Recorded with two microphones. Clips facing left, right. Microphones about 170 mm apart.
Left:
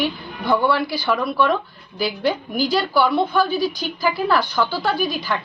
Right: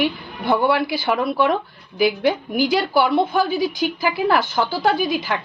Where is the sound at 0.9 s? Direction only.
25° right (ahead or behind).